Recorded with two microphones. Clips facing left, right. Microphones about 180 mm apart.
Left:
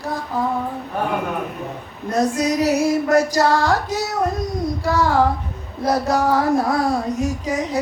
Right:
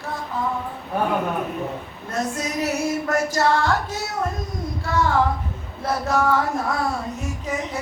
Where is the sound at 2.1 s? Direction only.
40° left (ahead or behind).